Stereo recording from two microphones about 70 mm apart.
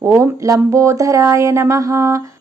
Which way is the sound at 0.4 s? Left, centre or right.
Right.